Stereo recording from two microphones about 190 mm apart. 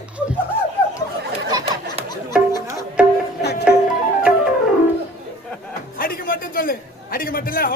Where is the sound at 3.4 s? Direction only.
60° left (ahead or behind).